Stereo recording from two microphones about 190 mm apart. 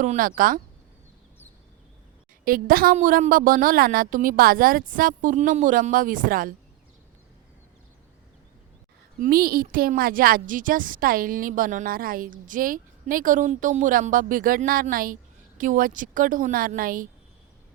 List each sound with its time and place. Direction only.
0.0 s a woman's voice: 40° right (ahead or behind)
2.4 s a woman's voice: 50° right (ahead or behind)
9.2 s a woman's voice: 50° right (ahead or behind)